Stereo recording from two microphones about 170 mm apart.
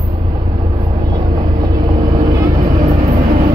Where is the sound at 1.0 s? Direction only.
25° right (ahead or behind).